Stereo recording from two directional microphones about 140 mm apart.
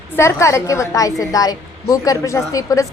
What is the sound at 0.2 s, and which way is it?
A woman's voice, 20° left (ahead or behind).